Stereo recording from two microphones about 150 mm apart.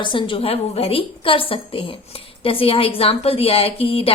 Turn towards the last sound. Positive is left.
turn(degrees=40)  # may be behind; listen again after turning